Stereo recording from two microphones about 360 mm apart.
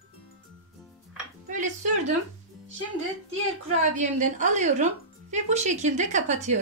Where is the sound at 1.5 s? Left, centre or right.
Right.